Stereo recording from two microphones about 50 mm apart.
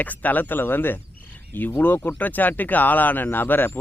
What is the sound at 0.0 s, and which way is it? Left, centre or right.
Speech, left.